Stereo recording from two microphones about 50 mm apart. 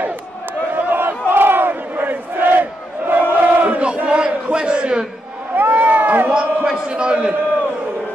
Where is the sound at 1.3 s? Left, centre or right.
Right.